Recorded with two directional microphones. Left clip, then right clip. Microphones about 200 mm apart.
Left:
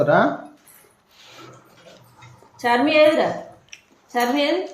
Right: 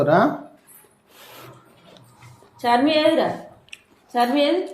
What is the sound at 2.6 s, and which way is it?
A woman's voice, 5° right (ahead or behind).